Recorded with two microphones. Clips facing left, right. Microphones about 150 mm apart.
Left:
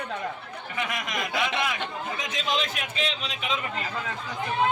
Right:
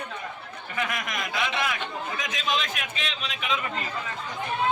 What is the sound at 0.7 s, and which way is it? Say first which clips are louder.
Speech: right 1 dB; 25° left (ahead or behind).